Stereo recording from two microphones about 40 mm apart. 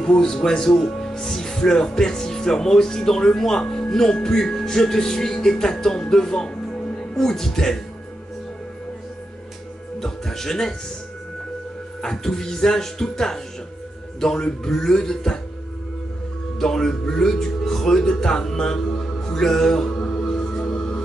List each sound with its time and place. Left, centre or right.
0.0 s speech: centre
6.5 s music: left
9.9 s music: centre
12.0 s speech: centre
16.5 s speech: centre
20.2 s music: centre